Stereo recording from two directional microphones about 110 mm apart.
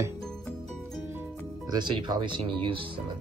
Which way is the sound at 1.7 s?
45° right (ahead or behind).